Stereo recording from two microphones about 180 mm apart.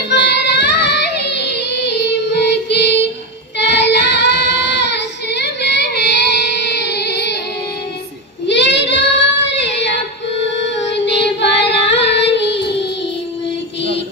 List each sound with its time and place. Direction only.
0.1 s child singing: 70° left (ahead or behind)
8.5 s child singing: 80° left
10.4 s female singing: 80° left